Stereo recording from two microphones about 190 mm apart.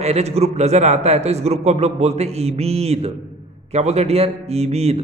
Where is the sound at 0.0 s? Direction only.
35° right (ahead or behind).